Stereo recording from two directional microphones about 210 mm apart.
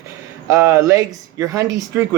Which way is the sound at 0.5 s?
15° right (ahead or behind).